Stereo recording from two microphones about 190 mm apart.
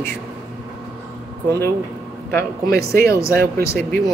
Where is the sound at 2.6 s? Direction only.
55° right (ahead or behind).